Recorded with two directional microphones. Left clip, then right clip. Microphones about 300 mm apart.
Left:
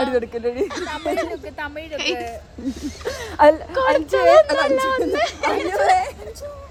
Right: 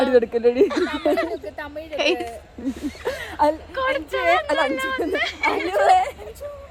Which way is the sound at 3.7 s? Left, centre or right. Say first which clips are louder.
Left 6 dB; left.